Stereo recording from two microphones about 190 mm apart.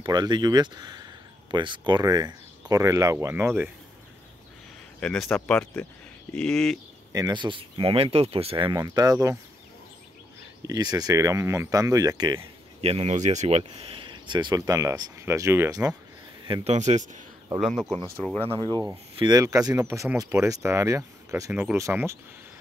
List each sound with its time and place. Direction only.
0.0 s speech: 20° right (ahead or behind)
5.0 s speech: 5° left (ahead or behind)
7.1 s speech: 20° right (ahead or behind)
10.6 s speech: 20° right (ahead or behind)
12.8 s speech: 30° right (ahead or behind); by 15.9 s 15° right (ahead or behind)
16.4 s speech: 25° right (ahead or behind)
16.7 s speech: 40° right (ahead or behind)
18.1 s speech: 5° left (ahead or behind)
18.5 s speech: 20° right (ahead or behind)